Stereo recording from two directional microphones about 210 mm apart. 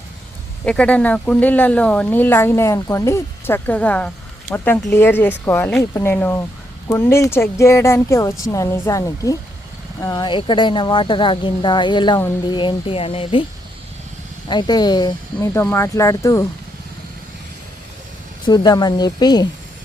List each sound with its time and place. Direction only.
0.6 s speech: 5° left (ahead or behind); by 13.4 s 25° left (ahead or behind)
14.4 s speech: 20° left (ahead or behind)
18.4 s speech: 20° left (ahead or behind)